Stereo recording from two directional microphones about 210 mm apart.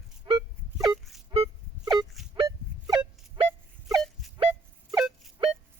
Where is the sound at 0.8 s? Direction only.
Centre (ahead or behind).